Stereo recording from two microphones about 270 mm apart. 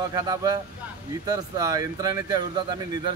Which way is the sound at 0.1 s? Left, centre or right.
Centre.